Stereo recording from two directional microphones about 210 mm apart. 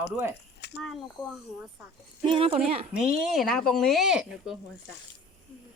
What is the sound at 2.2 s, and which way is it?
Speech, 25° right (ahead or behind).